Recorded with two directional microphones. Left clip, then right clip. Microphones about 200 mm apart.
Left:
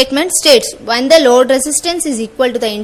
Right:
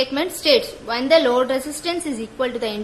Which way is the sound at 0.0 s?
30° left (ahead or behind).